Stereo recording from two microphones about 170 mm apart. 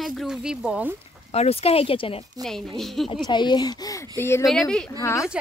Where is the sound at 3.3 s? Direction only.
25° left (ahead or behind).